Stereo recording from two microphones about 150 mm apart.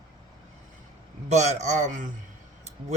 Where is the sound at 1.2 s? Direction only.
50° right (ahead or behind).